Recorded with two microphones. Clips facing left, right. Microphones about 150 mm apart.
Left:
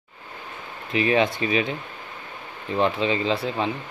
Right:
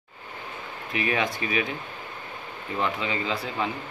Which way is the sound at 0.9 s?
25° left (ahead or behind).